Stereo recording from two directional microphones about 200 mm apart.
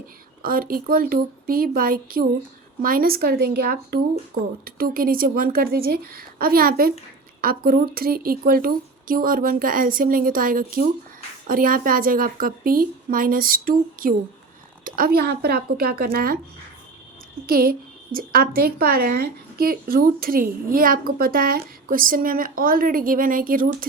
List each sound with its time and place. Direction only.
0.4 s a woman's voice: 45° right (ahead or behind)
17.4 s a woman's voice: 45° right (ahead or behind)